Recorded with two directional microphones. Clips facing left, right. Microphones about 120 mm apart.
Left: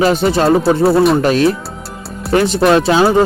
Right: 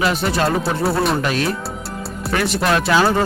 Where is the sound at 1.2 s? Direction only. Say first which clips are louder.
Left 9 dB; 35° left (ahead or behind).